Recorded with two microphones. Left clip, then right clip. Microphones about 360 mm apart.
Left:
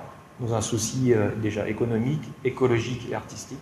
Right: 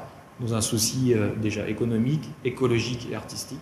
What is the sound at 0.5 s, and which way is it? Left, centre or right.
Speech, left.